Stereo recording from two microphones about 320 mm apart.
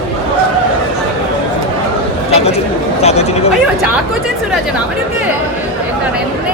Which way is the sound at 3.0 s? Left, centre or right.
Centre.